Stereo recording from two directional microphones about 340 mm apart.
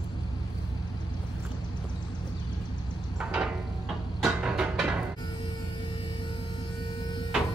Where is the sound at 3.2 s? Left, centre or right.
Centre.